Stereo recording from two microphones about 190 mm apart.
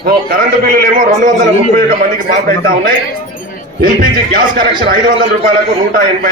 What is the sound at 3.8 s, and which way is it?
A man's voice, 50° right (ahead or behind).